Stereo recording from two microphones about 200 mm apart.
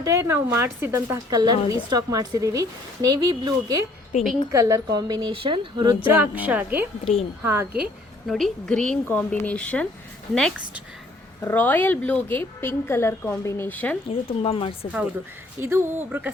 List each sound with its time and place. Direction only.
0.0 s a woman's voice: 15° right (ahead or behind)
6.1 s a woman's voice: 10° right (ahead or behind)
8.3 s a woman's voice: centre (ahead or behind)
11.4 s a woman's voice: 10° left (ahead or behind)
14.1 s speech: 30° left (ahead or behind)
15.6 s a woman's voice: 10° right (ahead or behind)